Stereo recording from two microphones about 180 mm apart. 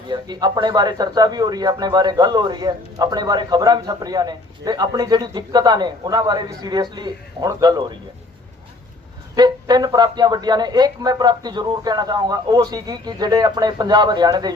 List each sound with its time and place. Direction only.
0.1 s speech: 25° right (ahead or behind)
9.3 s speech: 25° right (ahead or behind)